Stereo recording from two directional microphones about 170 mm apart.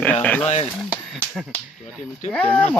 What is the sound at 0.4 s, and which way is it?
Speech, 40° left (ahead or behind).